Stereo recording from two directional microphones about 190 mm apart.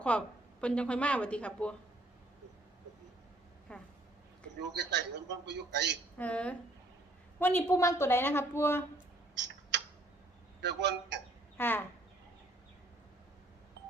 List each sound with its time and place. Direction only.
0.1 s a woman's voice: 5° left (ahead or behind)
3.7 s speech: 5° left (ahead or behind)
4.6 s a man's voice: 65° right (ahead or behind)
6.1 s a woman's voice: 5° left (ahead or behind)
9.3 s tick-tock: 65° right (ahead or behind)
10.6 s a man's voice: 65° right (ahead or behind)
11.5 s a woman's voice: 10° left (ahead or behind)